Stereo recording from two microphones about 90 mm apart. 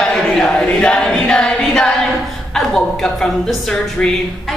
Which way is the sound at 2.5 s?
5° left (ahead or behind).